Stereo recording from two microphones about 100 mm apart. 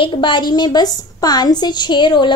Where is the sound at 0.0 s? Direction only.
55° left (ahead or behind).